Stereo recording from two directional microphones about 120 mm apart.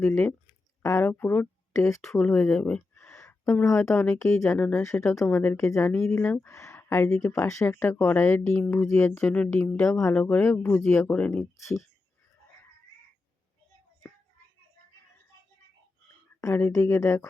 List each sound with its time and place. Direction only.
0.8 s speech: 20° left (ahead or behind)
1.9 s a woman's voice: 25° left (ahead or behind)
2.1 s speech: 10° left (ahead or behind)
4.2 s a woman's voice: 25° left (ahead or behind)
11.1 s speech: 5° left (ahead or behind)
11.5 s a woman's voice: 25° left (ahead or behind)
16.4 s a woman's voice: 25° left (ahead or behind)